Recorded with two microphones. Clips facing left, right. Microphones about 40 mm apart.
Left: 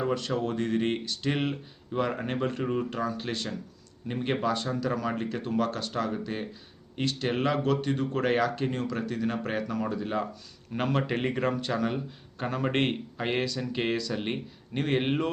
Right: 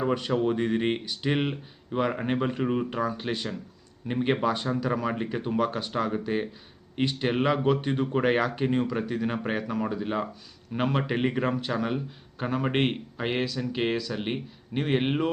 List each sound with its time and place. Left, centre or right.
0.0 s a man's voice: centre